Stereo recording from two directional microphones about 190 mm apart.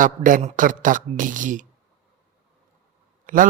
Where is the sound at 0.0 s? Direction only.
45° right (ahead or behind).